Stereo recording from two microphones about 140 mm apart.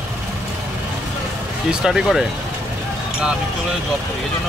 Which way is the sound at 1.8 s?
5° right (ahead or behind).